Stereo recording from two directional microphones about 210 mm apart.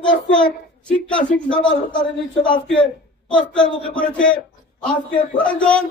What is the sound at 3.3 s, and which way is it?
A man's voice, 5° left (ahead or behind).